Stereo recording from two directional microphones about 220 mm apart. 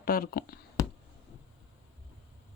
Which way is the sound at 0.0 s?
40° left (ahead or behind).